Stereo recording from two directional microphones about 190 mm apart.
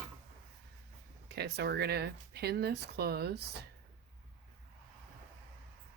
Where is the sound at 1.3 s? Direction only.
60° right (ahead or behind).